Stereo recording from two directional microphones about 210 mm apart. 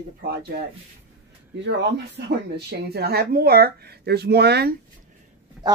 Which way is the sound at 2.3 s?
50° right (ahead or behind).